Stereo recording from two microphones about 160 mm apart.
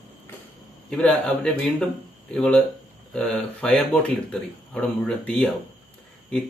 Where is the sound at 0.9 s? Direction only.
5° left (ahead or behind).